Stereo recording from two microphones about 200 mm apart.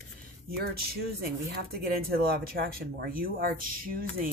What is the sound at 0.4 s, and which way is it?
Speech, 50° right (ahead or behind).